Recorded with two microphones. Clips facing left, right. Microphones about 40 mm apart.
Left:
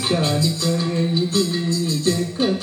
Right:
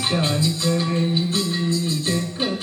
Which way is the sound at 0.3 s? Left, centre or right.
Centre.